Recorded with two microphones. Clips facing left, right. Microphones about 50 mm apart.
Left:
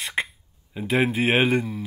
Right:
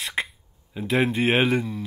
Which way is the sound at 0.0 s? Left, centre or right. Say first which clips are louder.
Left 1 dB; centre.